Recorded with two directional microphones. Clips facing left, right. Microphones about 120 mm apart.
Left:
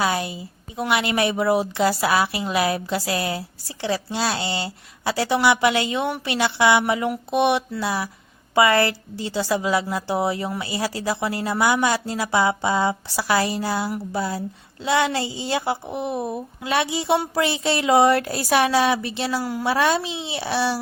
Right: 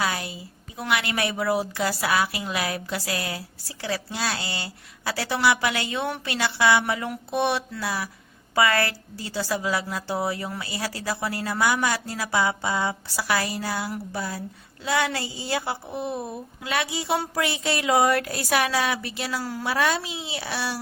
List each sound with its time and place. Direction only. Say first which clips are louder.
0.0 s a woman's voice: left 5 dB; 25° left (ahead or behind)
19.4 s a woman's voice: left 5 dB; 15° left (ahead or behind)
19.6 s a woman's voice: left 4 dB; 30° left (ahead or behind)